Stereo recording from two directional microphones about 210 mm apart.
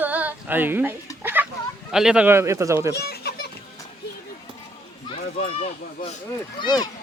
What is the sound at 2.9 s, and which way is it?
Speech, 50° left (ahead or behind).